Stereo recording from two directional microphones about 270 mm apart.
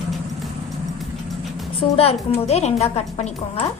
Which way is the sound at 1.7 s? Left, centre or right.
Left.